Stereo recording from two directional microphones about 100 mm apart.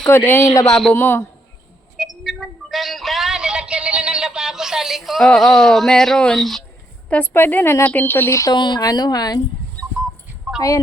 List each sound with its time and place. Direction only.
0.1 s a woman's voice: 25° left (ahead or behind)
0.6 s speech: centre (ahead or behind)
0.9 s a woman's voice: 25° left (ahead or behind)
2.0 s speech: centre (ahead or behind)
7.1 s a woman's voice: 20° left (ahead or behind)
8.5 s a woman's voice: 50° left (ahead or behind)
10.5 s dog: 5° right (ahead or behind)